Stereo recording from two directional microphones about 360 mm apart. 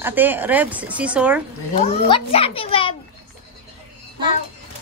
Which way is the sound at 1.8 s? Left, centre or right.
Centre.